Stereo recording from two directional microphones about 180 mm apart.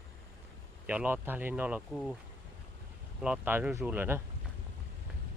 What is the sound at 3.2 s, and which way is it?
Speech, 10° right (ahead or behind).